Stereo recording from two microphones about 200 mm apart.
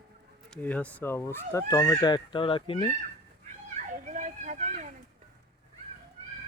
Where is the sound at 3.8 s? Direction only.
40° right (ahead or behind).